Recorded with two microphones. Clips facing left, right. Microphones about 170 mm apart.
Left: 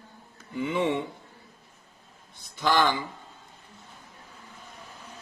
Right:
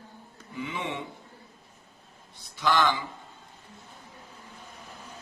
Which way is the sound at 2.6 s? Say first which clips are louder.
Left 1 dB; 50° left (ahead or behind).